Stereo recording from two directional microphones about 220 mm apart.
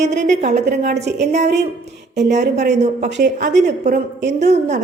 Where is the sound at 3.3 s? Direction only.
35° right (ahead or behind).